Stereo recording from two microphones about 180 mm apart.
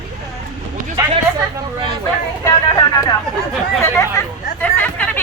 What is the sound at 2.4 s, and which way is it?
Vehicle, 20° left (ahead or behind).